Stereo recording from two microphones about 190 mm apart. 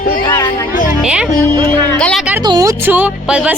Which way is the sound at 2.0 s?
5° left (ahead or behind).